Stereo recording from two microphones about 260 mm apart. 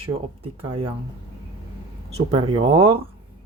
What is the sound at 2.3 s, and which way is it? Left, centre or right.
Speech, right.